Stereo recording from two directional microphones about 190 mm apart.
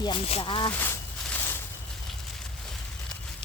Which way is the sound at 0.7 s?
10° left (ahead or behind).